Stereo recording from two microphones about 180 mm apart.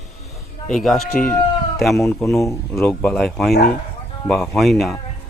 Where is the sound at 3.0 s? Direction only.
5° left (ahead or behind).